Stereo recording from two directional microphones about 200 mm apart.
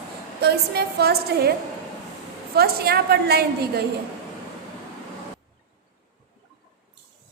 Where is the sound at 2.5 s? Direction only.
50° right (ahead or behind).